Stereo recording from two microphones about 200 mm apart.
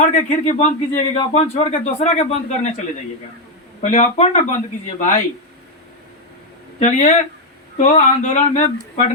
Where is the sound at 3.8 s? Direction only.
35° left (ahead or behind).